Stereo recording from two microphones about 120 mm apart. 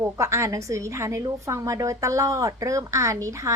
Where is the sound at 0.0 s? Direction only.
25° right (ahead or behind).